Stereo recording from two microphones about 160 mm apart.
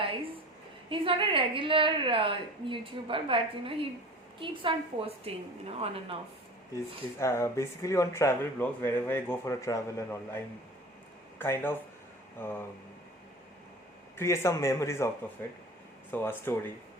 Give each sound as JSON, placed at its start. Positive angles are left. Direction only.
{"t": 0.9, "sound": "a woman's voice", "side_deg": -35}
{"t": 7.2, "sound": "speech", "side_deg": 15}
{"t": 14.2, "sound": "speech", "side_deg": 15}
{"t": 16.1, "sound": "speech", "side_deg": 15}